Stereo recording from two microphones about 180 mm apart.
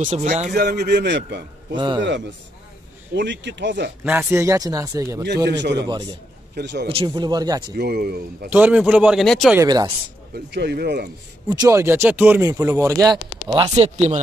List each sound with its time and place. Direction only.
0.0 s speech: 40° right (ahead or behind)
0.5 s a man's voice: 65° right (ahead or behind)
3.2 s a man's voice: 75° right (ahead or behind)
4.0 s speech: 10° right (ahead or behind)
5.2 s a man's voice: 70° right (ahead or behind)
5.8 s speech: 20° right (ahead or behind)
6.5 s a man's voice: 70° right (ahead or behind)
6.9 s speech: 25° right (ahead or behind)
7.7 s speech: 60° right (ahead or behind)
8.5 s speech: 10° right (ahead or behind)
9.6 s speech: 20° right (ahead or behind)
10.3 s speech: 70° right (ahead or behind)
11.4 s speech: 20° right (ahead or behind)
13.5 s speech: 35° right (ahead or behind)